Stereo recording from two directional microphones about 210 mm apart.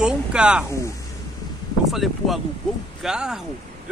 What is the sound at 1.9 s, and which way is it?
Speech, centre (ahead or behind).